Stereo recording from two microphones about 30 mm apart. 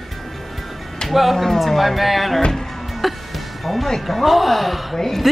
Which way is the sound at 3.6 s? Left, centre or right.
Centre.